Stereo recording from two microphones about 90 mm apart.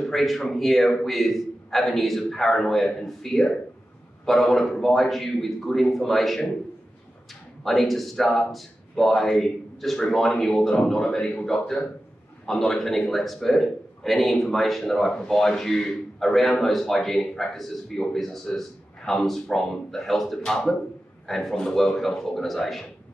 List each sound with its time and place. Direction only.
0.0 s a man's voice: centre (ahead or behind)
7.6 s a man's voice: centre (ahead or behind)